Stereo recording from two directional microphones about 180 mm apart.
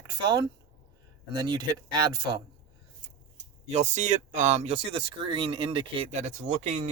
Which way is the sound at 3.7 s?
40° right (ahead or behind).